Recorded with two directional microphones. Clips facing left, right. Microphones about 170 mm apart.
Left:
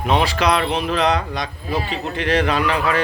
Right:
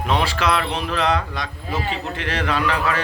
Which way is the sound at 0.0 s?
15° left (ahead or behind).